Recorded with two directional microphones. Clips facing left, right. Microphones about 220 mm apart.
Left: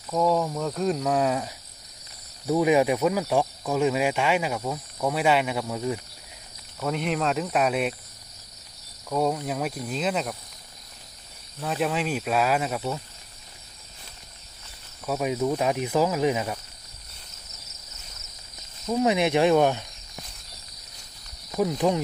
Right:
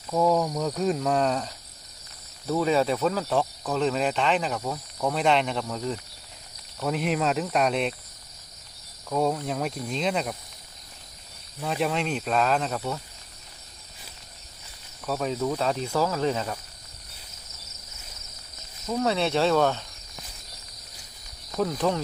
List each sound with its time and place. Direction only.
0.1 s cricket: centre (ahead or behind)
2.5 s speech: 15° left (ahead or behind)
6.7 s cricket: centre (ahead or behind)
9.0 s cricket: centre (ahead or behind)
11.6 s speech: centre (ahead or behind)
15.0 s speech: 10° left (ahead or behind)
18.9 s speech: 15° left (ahead or behind)
21.5 s speech: 10° left (ahead or behind)